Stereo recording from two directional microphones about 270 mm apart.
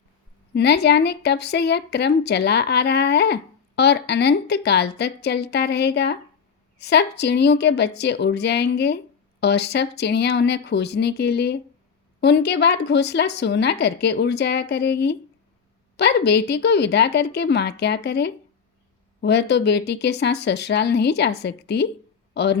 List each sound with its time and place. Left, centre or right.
0.5 s a woman's voice: left